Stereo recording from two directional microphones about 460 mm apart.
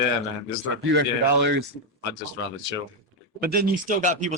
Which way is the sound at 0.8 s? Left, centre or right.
Right.